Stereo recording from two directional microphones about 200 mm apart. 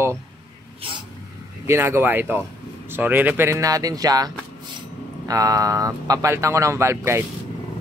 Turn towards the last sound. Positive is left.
turn(degrees=-15)  # may be behind; listen again after turning